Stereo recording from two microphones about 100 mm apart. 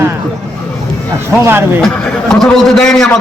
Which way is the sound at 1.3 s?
25° right (ahead or behind).